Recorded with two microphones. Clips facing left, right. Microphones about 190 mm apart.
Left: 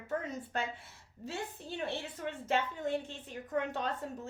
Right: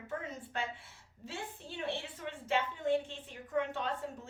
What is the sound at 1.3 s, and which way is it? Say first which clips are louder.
A woman's voice: left 4 dB; 40° left (ahead or behind).